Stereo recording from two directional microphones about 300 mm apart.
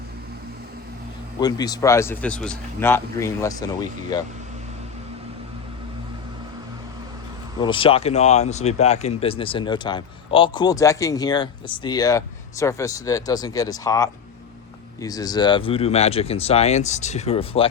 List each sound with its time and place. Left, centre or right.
1.4 s speech: centre
7.6 s speech: centre